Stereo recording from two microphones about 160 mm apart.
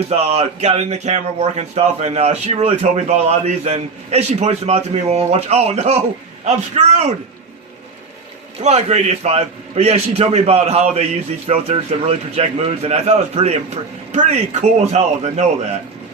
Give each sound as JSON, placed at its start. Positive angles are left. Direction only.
{"t": 0.1, "sound": "speech", "side_deg": -40}
{"t": 8.6, "sound": "a man's voice", "side_deg": -45}